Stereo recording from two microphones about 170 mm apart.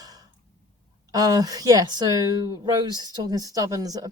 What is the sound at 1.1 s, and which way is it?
Speech, 20° right (ahead or behind).